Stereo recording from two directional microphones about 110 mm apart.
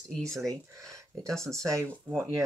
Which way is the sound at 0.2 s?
5° left (ahead or behind).